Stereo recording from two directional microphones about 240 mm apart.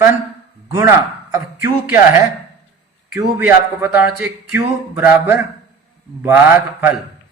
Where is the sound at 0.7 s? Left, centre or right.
Centre.